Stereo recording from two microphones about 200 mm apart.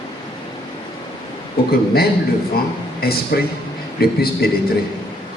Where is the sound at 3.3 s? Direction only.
50° left (ahead or behind).